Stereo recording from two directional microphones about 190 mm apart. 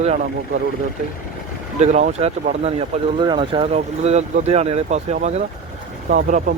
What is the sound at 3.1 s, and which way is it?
Speech, 25° right (ahead or behind).